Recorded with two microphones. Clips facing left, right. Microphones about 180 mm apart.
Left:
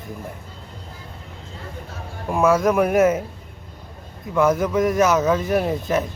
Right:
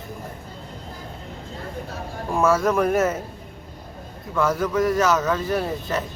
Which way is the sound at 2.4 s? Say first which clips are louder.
Left 2 dB; 15° left (ahead or behind).